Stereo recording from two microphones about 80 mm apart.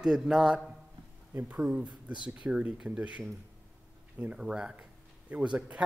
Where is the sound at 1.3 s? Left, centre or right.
Right.